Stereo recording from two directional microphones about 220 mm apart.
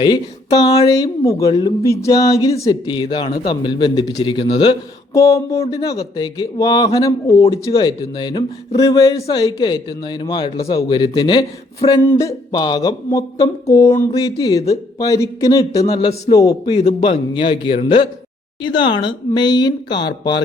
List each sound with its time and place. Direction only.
0.0 s speech: 20° left (ahead or behind)
15.8 s speech: 30° left (ahead or behind)
16.3 s speech: 15° left (ahead or behind)